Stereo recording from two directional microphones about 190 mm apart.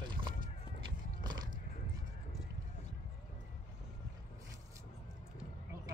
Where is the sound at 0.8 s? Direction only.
20° right (ahead or behind).